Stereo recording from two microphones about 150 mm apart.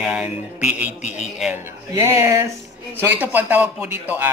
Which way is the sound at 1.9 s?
20° right (ahead or behind).